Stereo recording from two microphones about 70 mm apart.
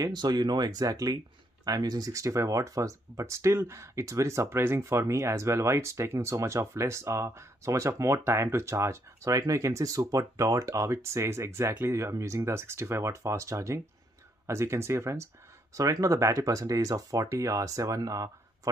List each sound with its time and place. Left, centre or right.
0.0 s speech: right
4.5 s speech: right
15.7 s speech: right